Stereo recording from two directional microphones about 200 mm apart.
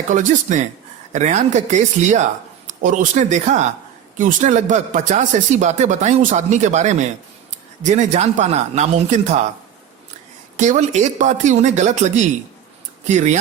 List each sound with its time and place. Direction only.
0.1 s speech: 40° right (ahead or behind)
10.6 s speech: 35° right (ahead or behind)